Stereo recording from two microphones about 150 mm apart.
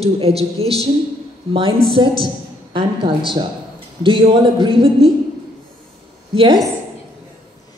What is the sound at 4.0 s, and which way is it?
A man's voice, 35° right (ahead or behind).